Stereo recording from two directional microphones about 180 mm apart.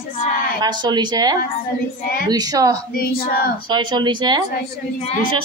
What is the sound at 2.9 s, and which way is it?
Speech, 55° left (ahead or behind).